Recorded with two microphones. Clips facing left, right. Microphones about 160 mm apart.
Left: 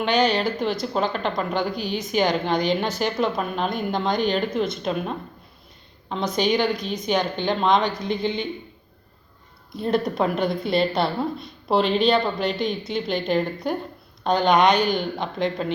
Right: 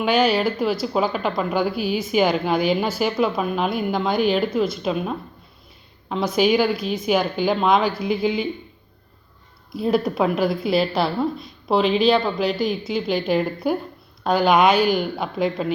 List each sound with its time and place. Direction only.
0.0 s speech: 5° right (ahead or behind)
9.7 s speech: 5° right (ahead or behind)